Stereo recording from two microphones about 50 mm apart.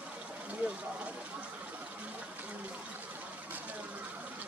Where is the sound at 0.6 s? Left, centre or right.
Right.